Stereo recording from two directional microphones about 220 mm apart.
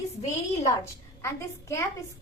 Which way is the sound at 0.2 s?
30° left (ahead or behind).